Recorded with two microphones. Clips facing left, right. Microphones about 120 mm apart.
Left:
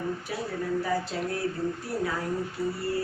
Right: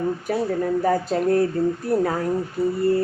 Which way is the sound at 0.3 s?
50° right (ahead or behind).